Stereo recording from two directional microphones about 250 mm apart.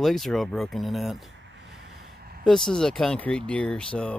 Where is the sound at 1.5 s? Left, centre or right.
Right.